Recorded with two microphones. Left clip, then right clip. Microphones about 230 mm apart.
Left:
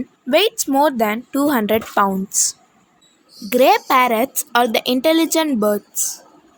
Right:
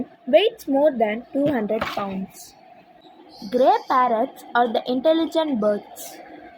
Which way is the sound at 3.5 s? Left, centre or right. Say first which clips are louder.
Left 4 dB; left.